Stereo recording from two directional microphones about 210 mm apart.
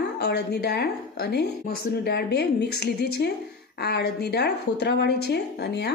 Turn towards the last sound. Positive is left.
turn(degrees=55)  # may be behind; listen again after turning